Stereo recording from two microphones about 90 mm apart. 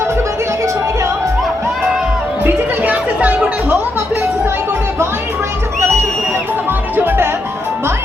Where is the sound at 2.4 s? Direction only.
20° right (ahead or behind).